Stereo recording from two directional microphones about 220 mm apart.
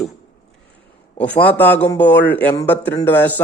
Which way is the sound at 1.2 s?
5° left (ahead or behind).